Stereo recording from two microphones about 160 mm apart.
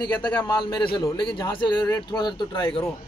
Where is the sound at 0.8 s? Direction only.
30° left (ahead or behind).